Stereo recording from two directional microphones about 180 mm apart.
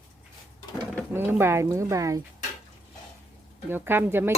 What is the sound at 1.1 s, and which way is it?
Speech, 10° right (ahead or behind).